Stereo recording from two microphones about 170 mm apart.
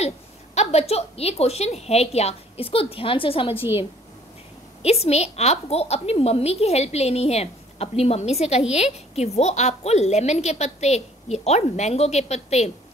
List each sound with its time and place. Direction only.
0.6 s a woman's voice: 40° left (ahead or behind)
4.8 s a woman's voice: 35° left (ahead or behind)